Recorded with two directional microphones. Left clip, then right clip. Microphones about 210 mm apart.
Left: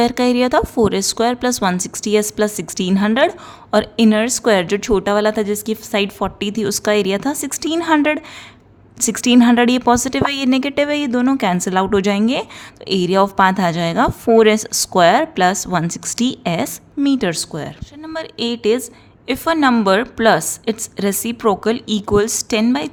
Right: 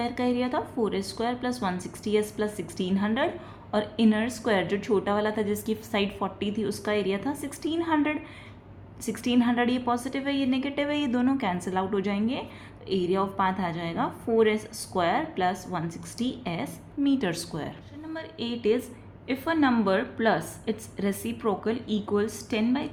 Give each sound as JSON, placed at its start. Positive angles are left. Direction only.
{"t": 0.0, "sound": "a woman's voice", "side_deg": 45}